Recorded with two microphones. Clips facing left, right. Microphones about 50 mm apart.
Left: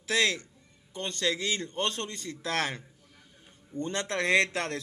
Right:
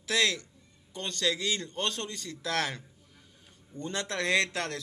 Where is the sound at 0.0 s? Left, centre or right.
Left.